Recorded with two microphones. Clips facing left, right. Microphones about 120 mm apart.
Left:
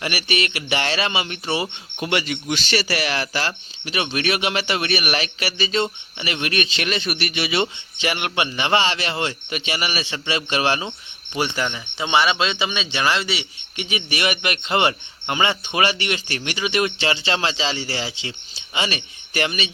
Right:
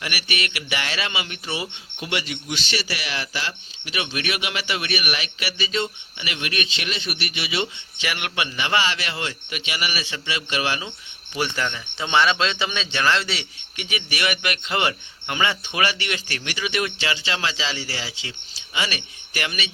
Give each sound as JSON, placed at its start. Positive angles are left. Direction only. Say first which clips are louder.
{"t": 0.0, "sound": "speech", "louder": "left 5 dB", "side_deg": 30}
{"t": 1.5, "sound": "speech", "louder": "left 5 dB", "side_deg": 60}
{"t": 8.0, "sound": "speech", "louder": "left 4 dB", "side_deg": 30}
{"t": 11.3, "sound": "speech", "louder": "left 2 dB", "side_deg": 20}
{"t": 13.4, "sound": "speech", "louder": "left 4 dB", "side_deg": 25}